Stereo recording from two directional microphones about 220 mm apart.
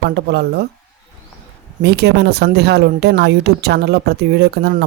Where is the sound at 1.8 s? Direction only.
45° right (ahead or behind).